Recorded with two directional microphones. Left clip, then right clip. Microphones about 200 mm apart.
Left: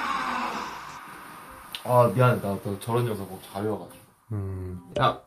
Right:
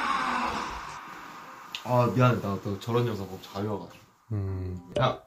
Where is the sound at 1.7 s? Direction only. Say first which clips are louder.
Left 5 dB; 15° left (ahead or behind).